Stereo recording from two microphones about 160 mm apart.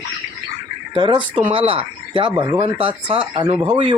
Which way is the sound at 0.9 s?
30° right (ahead or behind).